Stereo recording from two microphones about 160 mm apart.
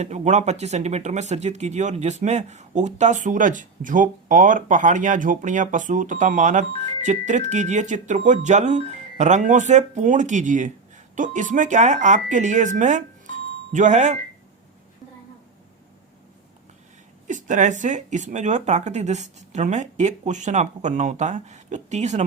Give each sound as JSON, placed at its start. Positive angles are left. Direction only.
{"t": 0.0, "sound": "speech", "side_deg": -45}
{"t": 17.2, "sound": "speech", "side_deg": -50}